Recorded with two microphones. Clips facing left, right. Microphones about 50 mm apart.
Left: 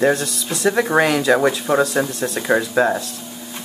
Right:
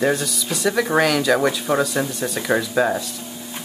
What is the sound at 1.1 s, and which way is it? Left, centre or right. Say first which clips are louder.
Speech: left 2 dB; centre.